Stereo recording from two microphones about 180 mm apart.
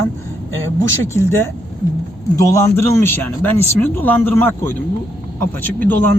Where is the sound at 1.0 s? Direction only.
15° left (ahead or behind).